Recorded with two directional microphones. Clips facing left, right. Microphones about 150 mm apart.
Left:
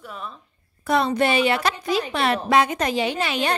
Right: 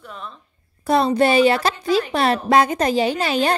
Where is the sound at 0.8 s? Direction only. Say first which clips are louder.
Right 4 dB; 30° right (ahead or behind).